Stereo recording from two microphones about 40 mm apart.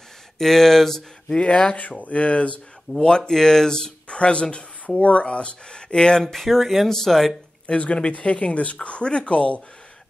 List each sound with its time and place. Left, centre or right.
0.4 s speech: centre
1.4 s speech: left
1.8 s speech: left; by 3.9 s centre
4.1 s speech: left
6.2 s speech: centre
7.6 s speech: left